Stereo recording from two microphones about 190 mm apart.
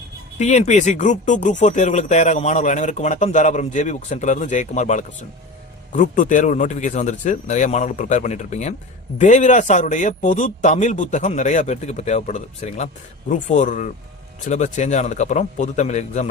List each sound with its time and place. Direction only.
0.3 s a man's voice: 35° left (ahead or behind)